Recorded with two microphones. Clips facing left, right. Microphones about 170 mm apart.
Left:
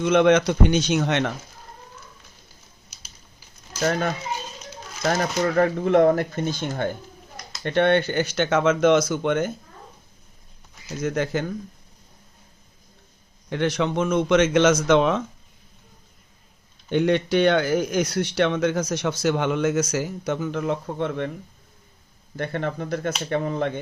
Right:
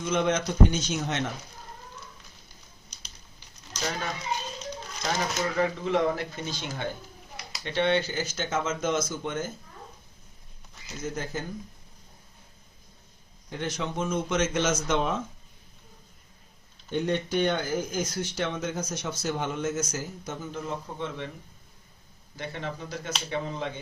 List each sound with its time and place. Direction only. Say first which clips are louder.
0.0 s speech: left 9 dB; 70° left (ahead or behind)
3.8 s speech: left 9 dB; 55° left (ahead or behind)
11.0 s speech: left 9 dB; 75° left (ahead or behind)
13.5 s speech: left 9 dB; 75° left (ahead or behind)
16.9 s speech: left 7 dB; 80° left; by 21.2 s 60° left (ahead or behind)
22.4 s speech: left 8 dB; 55° left (ahead or behind)